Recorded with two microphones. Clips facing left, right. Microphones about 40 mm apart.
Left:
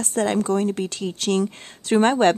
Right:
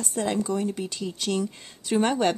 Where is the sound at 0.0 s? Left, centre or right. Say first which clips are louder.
Left 5 dB; left.